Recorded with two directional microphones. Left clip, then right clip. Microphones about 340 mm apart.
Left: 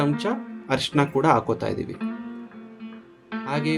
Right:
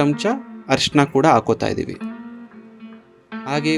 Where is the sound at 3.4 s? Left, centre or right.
Right.